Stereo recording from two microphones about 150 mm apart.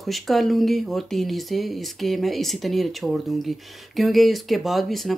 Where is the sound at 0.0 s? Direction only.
Centre (ahead or behind).